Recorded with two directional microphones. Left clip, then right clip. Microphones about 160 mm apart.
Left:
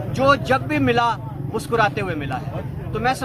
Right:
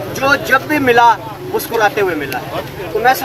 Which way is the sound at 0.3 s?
20° left (ahead or behind).